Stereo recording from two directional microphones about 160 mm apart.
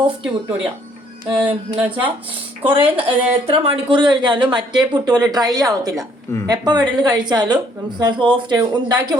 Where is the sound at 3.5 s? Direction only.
35° right (ahead or behind).